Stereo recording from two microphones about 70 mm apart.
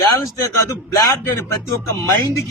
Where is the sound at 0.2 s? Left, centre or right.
Left.